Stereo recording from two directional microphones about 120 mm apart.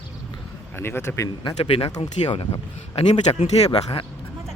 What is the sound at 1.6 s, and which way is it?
Speech, 50° left (ahead or behind).